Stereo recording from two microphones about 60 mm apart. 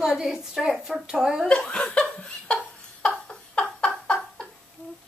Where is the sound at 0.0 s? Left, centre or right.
Centre.